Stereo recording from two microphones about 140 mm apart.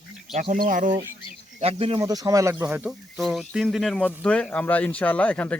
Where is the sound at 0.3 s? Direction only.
70° right (ahead or behind).